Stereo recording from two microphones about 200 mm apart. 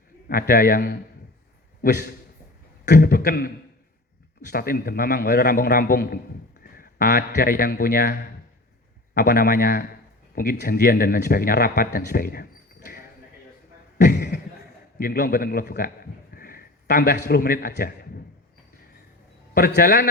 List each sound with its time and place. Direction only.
0.3 s a man's voice: 45° left (ahead or behind)
14.1 s a sound: 55° left (ahead or behind)
14.9 s a man's voice: 45° left (ahead or behind)
19.5 s speech: 50° left (ahead or behind)